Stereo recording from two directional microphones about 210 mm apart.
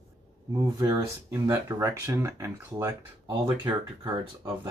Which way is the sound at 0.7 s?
15° right (ahead or behind).